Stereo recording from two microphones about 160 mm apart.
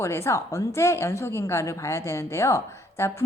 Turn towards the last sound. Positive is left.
turn(degrees=15)  # may be behind; listen again after turning